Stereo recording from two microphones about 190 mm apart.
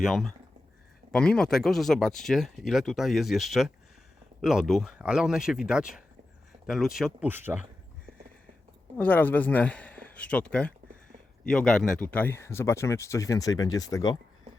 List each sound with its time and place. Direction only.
0.0 s speech: centre (ahead or behind)
9.0 s speech: 10° left (ahead or behind)